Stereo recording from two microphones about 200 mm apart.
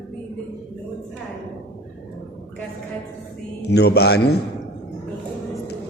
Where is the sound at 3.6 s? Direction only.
55° left (ahead or behind).